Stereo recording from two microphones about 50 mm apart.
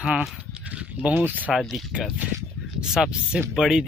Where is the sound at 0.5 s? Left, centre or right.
Right.